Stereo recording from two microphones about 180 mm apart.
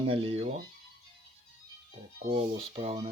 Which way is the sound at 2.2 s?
35° right (ahead or behind).